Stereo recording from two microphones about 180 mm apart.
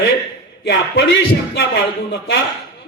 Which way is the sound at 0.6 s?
60° left (ahead or behind).